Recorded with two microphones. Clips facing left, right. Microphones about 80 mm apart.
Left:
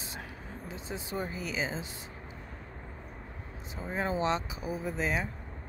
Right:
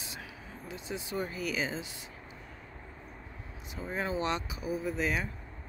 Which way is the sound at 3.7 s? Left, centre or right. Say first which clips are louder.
Left 1 dB; left.